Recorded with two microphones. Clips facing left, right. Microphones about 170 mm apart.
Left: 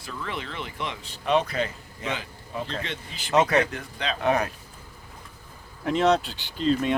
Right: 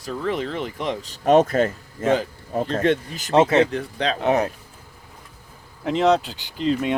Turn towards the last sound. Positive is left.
turn(degrees=-15)  # may be behind; listen again after turning